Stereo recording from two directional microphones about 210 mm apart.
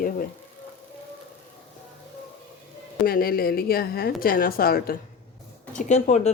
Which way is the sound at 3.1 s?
45° left (ahead or behind).